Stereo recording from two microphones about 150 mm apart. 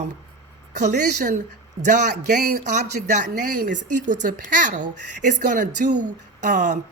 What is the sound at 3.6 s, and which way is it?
A woman's voice, 55° right (ahead or behind).